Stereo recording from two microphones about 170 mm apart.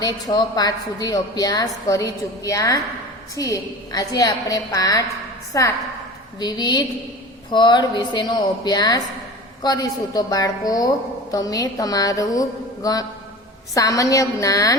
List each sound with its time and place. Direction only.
0.0 s a woman's voice: 25° left (ahead or behind)